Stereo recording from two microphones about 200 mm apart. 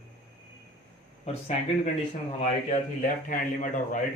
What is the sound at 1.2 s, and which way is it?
A man's voice, 30° left (ahead or behind).